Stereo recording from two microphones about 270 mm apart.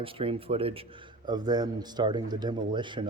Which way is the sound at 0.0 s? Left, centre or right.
Centre.